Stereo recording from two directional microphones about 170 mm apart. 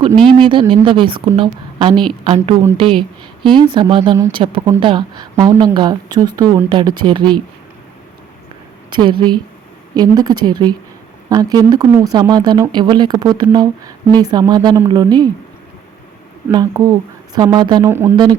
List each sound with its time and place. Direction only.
0.3 s a woman's voice: 30° right (ahead or behind)
8.9 s speech: 25° right (ahead or behind)
16.5 s speech: 20° right (ahead or behind)
17.8 s speech: 15° right (ahead or behind)